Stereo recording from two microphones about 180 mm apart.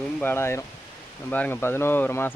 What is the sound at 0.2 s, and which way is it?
Speech, 10° left (ahead or behind).